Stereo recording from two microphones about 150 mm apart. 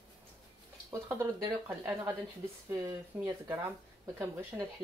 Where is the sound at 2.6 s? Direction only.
20° right (ahead or behind).